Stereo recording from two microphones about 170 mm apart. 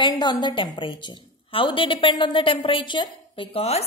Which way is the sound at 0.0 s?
25° left (ahead or behind).